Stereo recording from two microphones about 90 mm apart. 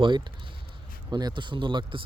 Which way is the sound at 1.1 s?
50° right (ahead or behind).